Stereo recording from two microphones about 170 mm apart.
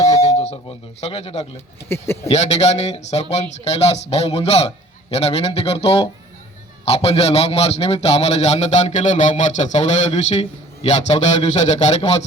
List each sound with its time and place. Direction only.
0.3 s speech: 35° left (ahead or behind)
1.9 s speech: 15° left (ahead or behind)
2.2 s a man's voice: 40° left (ahead or behind)